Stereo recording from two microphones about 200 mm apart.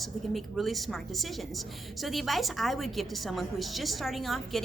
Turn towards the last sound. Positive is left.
turn(degrees=0)  # may be behind; listen again after turning